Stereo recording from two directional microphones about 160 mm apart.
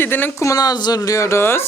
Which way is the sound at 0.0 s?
10° left (ahead or behind).